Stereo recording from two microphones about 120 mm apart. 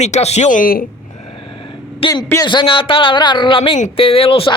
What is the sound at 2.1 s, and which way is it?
Speech, 30° left (ahead or behind).